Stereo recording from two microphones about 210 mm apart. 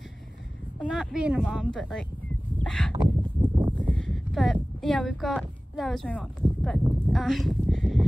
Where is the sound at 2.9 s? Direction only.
25° right (ahead or behind).